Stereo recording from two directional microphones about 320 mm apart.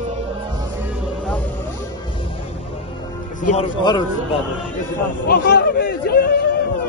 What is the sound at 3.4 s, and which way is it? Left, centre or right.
Speech, centre.